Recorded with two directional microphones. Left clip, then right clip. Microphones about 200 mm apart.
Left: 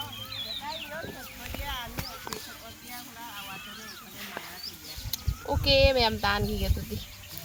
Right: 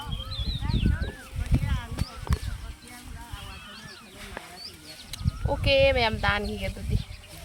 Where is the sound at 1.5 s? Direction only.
5° right (ahead or behind).